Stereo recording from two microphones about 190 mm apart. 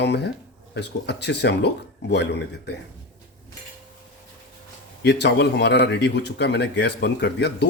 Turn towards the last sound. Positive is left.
turn(degrees=60)  # may be behind; listen again after turning